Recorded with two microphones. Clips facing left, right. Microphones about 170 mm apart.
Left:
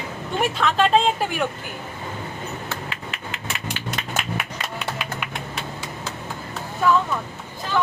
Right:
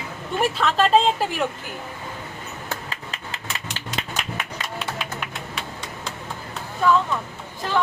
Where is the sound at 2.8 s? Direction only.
35° right (ahead or behind).